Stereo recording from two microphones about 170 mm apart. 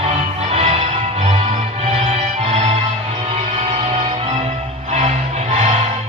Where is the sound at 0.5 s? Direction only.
40° right (ahead or behind).